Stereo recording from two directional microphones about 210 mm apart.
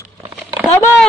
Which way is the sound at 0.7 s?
10° left (ahead or behind).